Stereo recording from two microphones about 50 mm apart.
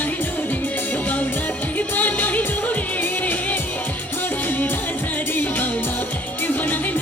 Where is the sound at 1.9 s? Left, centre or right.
Left.